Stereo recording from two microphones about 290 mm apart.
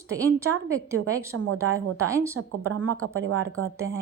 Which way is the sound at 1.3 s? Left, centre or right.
Right.